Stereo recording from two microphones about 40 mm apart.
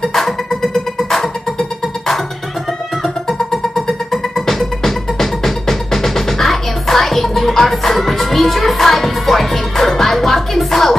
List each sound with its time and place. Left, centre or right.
0.0 s music: centre
3.3 s music: centre